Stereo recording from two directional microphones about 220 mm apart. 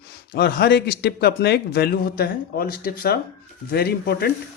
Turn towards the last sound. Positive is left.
turn(degrees=45)  # may be behind; listen again after turning